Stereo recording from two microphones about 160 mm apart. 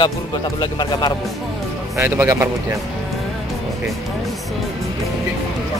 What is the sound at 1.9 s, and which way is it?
Speech, 15° right (ahead or behind).